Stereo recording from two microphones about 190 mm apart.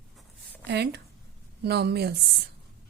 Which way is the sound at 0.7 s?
60° right (ahead or behind).